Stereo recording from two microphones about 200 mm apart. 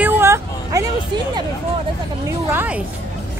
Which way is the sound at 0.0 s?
15° right (ahead or behind).